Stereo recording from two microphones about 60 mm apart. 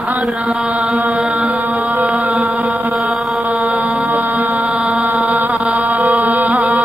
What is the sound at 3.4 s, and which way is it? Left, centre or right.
Mantra, right.